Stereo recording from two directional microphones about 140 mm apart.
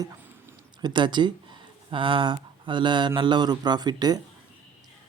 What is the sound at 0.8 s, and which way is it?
Speech, 30° right (ahead or behind).